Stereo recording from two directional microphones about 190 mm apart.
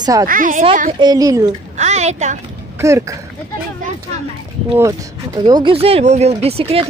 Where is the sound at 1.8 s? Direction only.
35° right (ahead or behind).